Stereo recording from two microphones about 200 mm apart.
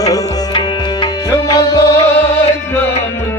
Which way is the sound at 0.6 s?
20° left (ahead or behind).